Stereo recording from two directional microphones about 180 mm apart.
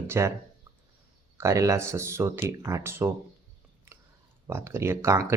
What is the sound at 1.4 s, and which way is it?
Speech, 15° right (ahead or behind).